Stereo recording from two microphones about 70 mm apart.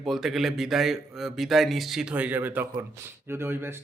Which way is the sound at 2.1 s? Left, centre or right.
Right.